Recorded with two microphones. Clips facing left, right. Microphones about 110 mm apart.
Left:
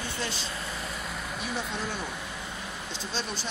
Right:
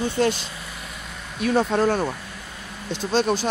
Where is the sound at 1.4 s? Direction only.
65° right (ahead or behind).